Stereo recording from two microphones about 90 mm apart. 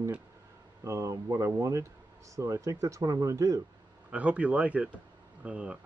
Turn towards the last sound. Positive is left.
turn(degrees=-10)  # may be behind; listen again after turning